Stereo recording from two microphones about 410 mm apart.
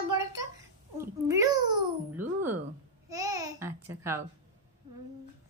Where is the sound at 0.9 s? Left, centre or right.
Centre.